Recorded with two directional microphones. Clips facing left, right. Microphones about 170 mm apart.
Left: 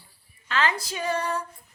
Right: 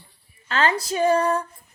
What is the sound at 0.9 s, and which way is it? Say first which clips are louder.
Female singing: right 9 dB; 45° right (ahead or behind).